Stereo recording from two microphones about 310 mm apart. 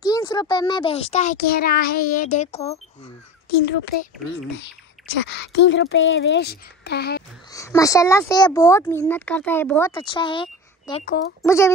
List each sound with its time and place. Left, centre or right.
0.0 s a child's voice: centre
3.6 s speech: left
5.0 s a sound: centre
5.3 s speech: left
7.5 s speech: centre
11.1 s a child's voice: left
11.4 s speech: centre